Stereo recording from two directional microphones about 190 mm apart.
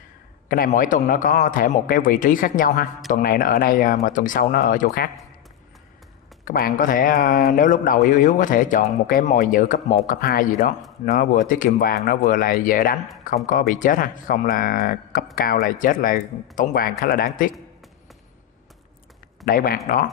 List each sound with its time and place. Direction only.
0.5 s a man's voice: 45° left (ahead or behind)
6.4 s a man's voice: 50° left (ahead or behind)
19.4 s a man's voice: 50° left (ahead or behind)